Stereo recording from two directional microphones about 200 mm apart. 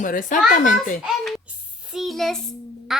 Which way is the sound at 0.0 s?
40° left (ahead or behind).